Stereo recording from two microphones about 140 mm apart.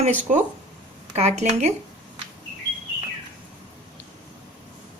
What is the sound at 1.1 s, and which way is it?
Speech, 55° right (ahead or behind).